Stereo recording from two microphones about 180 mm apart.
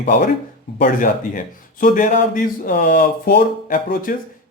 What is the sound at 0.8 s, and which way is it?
Speech, 50° left (ahead or behind).